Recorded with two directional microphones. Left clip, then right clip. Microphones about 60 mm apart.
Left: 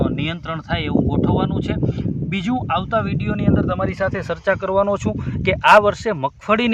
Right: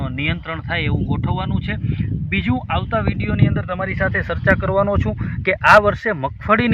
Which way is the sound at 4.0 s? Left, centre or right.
Left.